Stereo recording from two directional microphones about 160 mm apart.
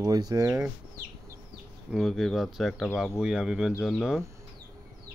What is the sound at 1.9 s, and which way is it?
Speech, centre (ahead or behind).